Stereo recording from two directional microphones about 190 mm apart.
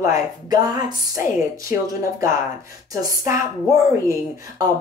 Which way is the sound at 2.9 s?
20° right (ahead or behind).